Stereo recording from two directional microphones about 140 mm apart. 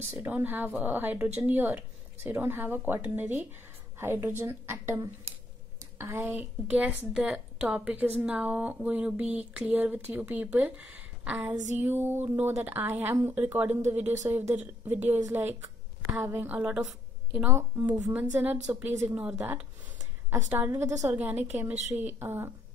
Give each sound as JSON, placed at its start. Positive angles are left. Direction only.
{"t": 0.2, "sound": "a woman's voice", "side_deg": -10}
{"t": 21.1, "sound": "a woman's voice", "side_deg": -10}